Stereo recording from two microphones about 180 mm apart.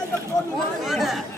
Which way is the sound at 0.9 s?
Centre (ahead or behind).